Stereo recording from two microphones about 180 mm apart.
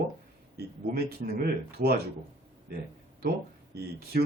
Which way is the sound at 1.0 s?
55° right (ahead or behind).